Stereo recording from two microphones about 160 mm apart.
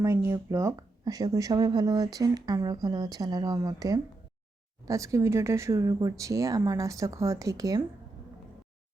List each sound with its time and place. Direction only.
0.0 s speech: 15° right (ahead or behind)